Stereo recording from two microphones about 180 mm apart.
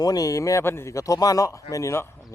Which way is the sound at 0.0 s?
20° left (ahead or behind).